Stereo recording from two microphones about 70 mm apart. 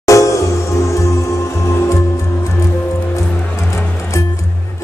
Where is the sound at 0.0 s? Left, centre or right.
Left.